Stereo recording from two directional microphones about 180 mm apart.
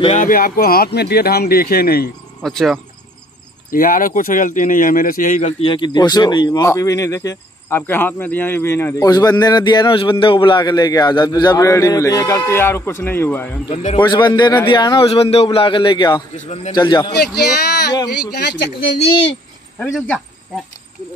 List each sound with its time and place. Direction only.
0.0 s speech: 45° left (ahead or behind)
2.4 s speech: centre (ahead or behind)
3.7 s speech: 50° left (ahead or behind)
5.6 s speech: 25° left (ahead or behind)
13.9 s speech: 25° left (ahead or behind)
16.3 s speech: 40° left (ahead or behind)
16.7 s speech: 25° left (ahead or behind)
18.3 s a man's voice: 70° left (ahead or behind)
18.9 s speech: 30° left (ahead or behind)
19.8 s speech: 5° left (ahead or behind)